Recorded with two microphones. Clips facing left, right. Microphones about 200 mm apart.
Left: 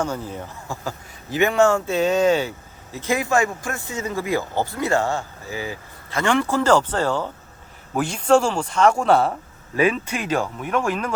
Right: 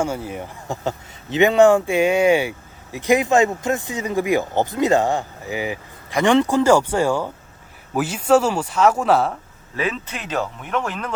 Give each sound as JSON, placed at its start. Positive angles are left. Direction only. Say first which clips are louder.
{"t": 0.0, "sound": "speech", "louder": "right 2 dB", "side_deg": -10}
{"t": 9.7, "sound": "speech", "louder": "left 5 dB", "side_deg": 10}